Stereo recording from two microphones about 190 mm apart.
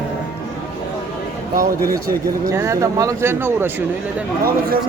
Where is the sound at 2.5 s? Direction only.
15° right (ahead or behind).